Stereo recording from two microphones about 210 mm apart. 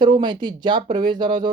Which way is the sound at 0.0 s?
20° right (ahead or behind).